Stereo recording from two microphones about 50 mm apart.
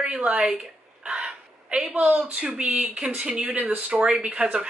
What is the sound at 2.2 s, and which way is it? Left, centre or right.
Speech, right.